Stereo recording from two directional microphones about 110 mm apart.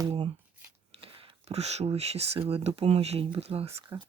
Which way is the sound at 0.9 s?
60° right (ahead or behind).